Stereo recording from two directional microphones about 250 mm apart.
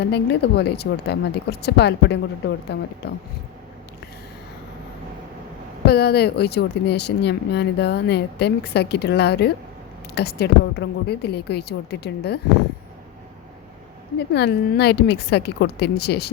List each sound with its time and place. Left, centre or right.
0.0 s speech: left
5.8 s speech: left
14.2 s speech: left